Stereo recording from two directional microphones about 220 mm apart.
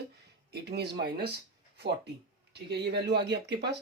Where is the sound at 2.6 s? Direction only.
50° right (ahead or behind).